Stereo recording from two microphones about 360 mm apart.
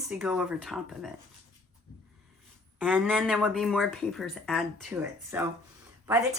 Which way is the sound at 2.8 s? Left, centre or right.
Centre.